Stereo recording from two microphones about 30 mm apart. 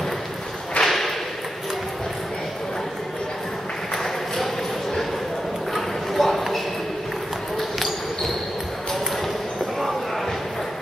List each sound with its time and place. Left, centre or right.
0.8 s whip: left
3.9 s a sound: centre
5.7 s clip-clop: centre